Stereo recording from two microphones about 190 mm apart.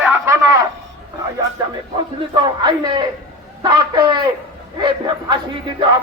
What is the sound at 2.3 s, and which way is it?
Speech, 25° right (ahead or behind).